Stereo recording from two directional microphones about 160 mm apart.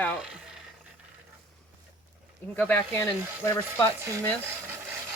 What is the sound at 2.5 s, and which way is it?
Speech, 10° left (ahead or behind).